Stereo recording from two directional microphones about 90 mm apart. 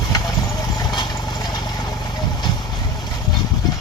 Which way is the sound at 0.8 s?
50° left (ahead or behind).